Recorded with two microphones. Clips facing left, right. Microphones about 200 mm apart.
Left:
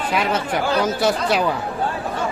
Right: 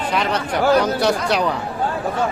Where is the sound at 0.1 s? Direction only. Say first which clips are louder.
Even; 5° left (ahead or behind).